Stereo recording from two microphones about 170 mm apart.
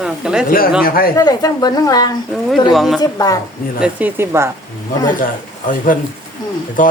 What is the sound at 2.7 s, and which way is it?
Speech, centre (ahead or behind).